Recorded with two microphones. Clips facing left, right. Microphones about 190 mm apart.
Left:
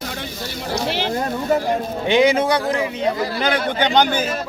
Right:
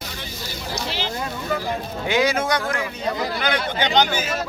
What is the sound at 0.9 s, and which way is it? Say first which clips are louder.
Speech: left 6 dB; 55° left (ahead or behind).